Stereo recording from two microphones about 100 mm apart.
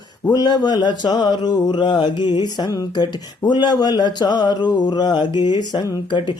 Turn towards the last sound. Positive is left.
turn(degrees=45)  # may be behind; listen again after turning